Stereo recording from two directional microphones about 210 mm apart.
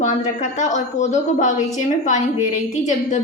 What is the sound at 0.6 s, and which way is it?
A woman's voice, 35° left (ahead or behind).